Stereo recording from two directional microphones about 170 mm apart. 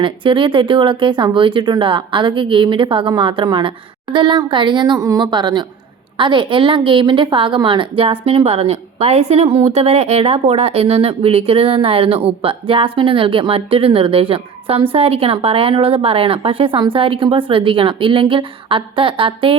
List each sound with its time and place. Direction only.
0.0 s a woman's voice: 30° right (ahead or behind)